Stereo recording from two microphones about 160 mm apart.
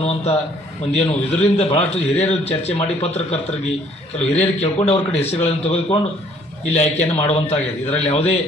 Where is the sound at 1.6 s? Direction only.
40° left (ahead or behind).